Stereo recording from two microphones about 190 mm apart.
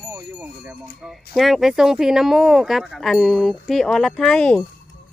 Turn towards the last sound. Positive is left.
turn(degrees=5)  # may be behind; listen again after turning